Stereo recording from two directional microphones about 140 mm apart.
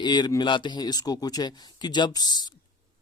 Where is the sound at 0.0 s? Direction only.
30° left (ahead or behind).